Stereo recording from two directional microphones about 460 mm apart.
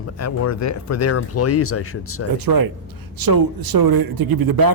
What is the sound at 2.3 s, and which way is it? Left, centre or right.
A man's voice, right.